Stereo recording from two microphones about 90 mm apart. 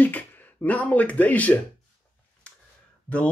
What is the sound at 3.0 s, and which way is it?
Speech, 15° left (ahead or behind).